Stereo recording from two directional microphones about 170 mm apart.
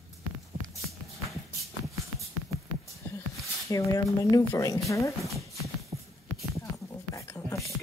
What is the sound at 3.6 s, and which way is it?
A woman's voice, 20° left (ahead or behind).